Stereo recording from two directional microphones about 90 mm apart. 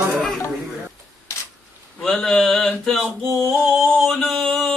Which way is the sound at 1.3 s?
30° left (ahead or behind).